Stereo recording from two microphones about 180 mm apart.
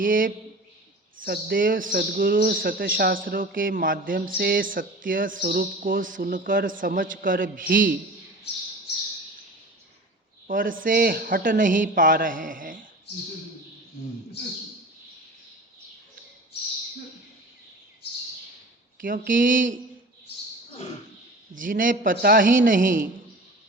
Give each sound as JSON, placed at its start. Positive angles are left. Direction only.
{"t": 0.0, "sound": "speech", "side_deg": -50}
{"t": 10.4, "sound": "speech", "side_deg": -50}
{"t": 19.0, "sound": "speech", "side_deg": -50}
{"t": 21.6, "sound": "speech", "side_deg": -50}